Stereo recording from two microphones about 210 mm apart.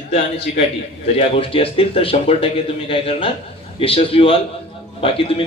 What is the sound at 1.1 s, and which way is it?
A man's voice, 25° left (ahead or behind).